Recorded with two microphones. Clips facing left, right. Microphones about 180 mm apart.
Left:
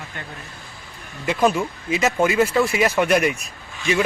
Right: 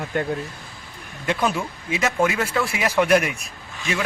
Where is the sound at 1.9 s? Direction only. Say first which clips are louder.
Left 3 dB; centre (ahead or behind).